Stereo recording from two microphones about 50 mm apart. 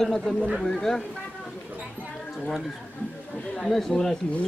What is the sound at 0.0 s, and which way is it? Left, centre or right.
A man's voice, centre.